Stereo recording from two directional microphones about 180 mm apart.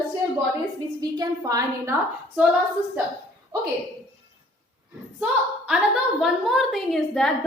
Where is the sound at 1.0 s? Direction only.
20° right (ahead or behind).